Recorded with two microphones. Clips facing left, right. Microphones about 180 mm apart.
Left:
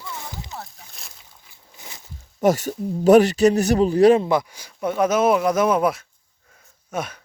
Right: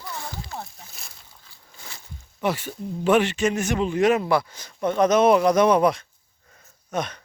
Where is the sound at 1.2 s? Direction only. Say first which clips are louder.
Even; 20° left (ahead or behind).